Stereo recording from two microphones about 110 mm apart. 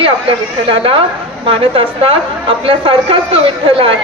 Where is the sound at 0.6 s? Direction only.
55° right (ahead or behind).